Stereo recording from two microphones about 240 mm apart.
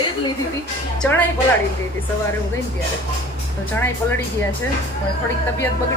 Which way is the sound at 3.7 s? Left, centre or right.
Centre.